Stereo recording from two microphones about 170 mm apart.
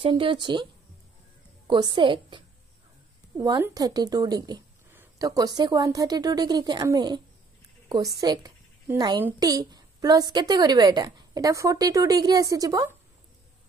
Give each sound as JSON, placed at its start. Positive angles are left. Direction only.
{"t": 0.0, "sound": "a woman's voice", "side_deg": -30}
{"t": 1.7, "sound": "a woman's voice", "side_deg": -30}
{"t": 8.2, "sound": "a woman's voice", "side_deg": -20}